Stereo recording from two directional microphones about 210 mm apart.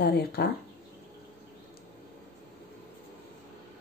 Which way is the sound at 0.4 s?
50° left (ahead or behind).